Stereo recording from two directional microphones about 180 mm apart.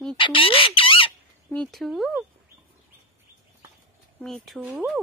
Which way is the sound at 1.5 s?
5° left (ahead or behind).